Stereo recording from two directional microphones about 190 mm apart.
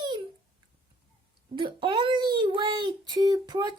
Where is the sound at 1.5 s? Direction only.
25° right (ahead or behind).